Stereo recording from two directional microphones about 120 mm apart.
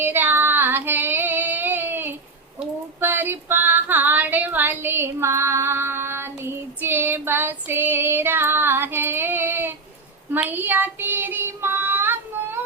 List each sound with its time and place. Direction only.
0.0 s female singing: 15° right (ahead or behind)
10.3 s child singing: 15° right (ahead or behind)